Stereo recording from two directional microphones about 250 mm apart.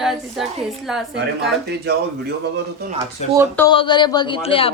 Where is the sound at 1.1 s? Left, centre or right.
Right.